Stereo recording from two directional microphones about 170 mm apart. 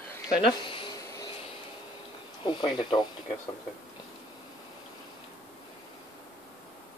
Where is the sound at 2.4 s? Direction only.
30° left (ahead or behind).